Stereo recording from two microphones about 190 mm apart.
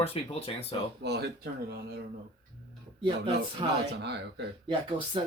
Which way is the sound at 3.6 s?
25° right (ahead or behind).